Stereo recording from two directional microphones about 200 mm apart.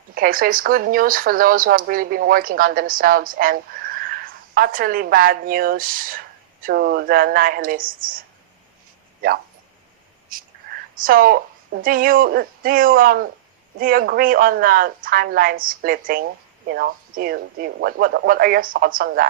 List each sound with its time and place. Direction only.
0.1 s speech: 45° right (ahead or behind)
9.2 s speech: 45° right (ahead or behind)